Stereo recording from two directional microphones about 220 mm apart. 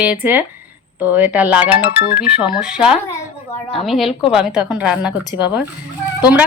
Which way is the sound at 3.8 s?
Centre (ahead or behind).